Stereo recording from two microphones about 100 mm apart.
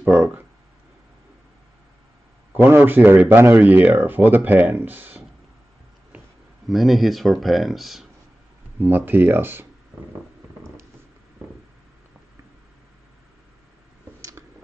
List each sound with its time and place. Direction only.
0.0 s speech: 20° right (ahead or behind)
2.5 s speech: 20° right (ahead or behind)
6.7 s speech: centre (ahead or behind)
8.7 s speech: 20° right (ahead or behind)